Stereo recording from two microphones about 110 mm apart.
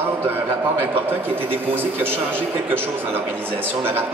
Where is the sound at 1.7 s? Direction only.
20° right (ahead or behind).